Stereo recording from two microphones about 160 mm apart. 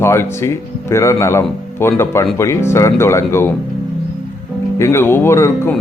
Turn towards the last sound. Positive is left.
turn(degrees=15)  # may be behind; listen again after turning